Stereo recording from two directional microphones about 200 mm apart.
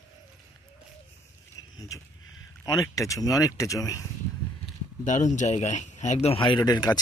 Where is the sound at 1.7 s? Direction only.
15° left (ahead or behind).